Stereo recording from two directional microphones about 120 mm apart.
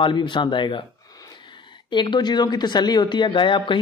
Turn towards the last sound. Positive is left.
turn(degrees=40)  # may be behind; listen again after turning